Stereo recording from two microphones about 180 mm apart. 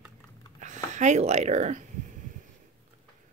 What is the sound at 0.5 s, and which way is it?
Speech, 40° right (ahead or behind).